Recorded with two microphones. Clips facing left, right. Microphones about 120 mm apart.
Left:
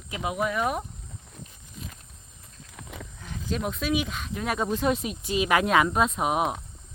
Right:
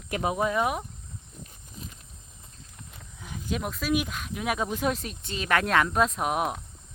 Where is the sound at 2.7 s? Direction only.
90° left.